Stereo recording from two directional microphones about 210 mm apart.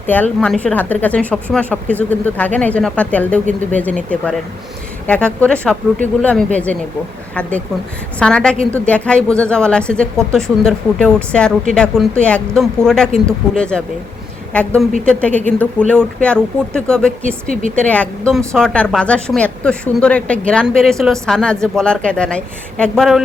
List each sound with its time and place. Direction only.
0.1 s a woman's voice: 5° left (ahead or behind)
8.2 s a woman's voice: 5° left (ahead or behind)